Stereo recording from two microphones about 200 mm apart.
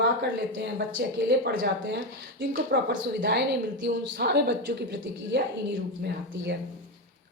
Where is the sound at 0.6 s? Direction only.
55° right (ahead or behind).